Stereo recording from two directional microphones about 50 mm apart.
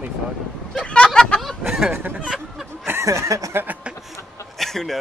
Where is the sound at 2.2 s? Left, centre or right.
Centre.